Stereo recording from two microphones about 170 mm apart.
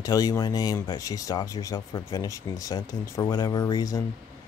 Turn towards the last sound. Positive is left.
turn(degrees=20)  # may be behind; listen again after turning